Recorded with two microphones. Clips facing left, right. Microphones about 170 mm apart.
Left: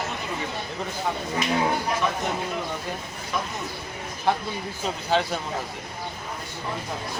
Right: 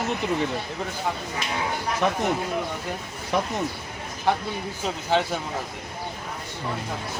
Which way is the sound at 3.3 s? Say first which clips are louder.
Right 5 dB; 65° right (ahead or behind).